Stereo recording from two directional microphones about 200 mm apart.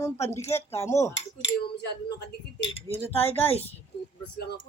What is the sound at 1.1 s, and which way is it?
Cutlery, 60° left (ahead or behind).